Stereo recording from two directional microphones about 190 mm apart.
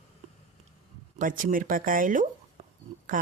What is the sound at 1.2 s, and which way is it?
Speech, 45° right (ahead or behind).